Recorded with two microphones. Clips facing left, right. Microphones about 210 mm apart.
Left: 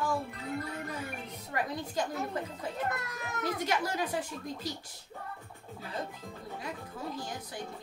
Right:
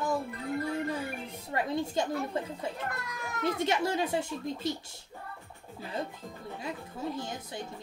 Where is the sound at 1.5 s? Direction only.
25° right (ahead or behind).